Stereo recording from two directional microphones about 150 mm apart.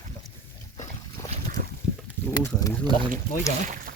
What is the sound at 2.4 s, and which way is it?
Speech, 25° left (ahead or behind).